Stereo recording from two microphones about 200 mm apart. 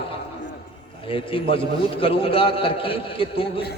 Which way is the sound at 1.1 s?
25° left (ahead or behind).